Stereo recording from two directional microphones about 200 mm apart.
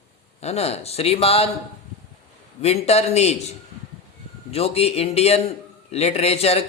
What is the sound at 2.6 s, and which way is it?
A man's voice, 30° left (ahead or behind).